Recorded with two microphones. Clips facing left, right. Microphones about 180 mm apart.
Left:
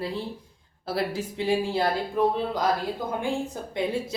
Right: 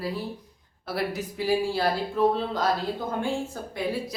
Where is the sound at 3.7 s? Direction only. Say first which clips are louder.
Left 2 dB; 25° left (ahead or behind).